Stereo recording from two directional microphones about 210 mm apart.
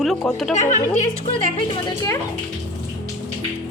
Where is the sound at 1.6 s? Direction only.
20° left (ahead or behind).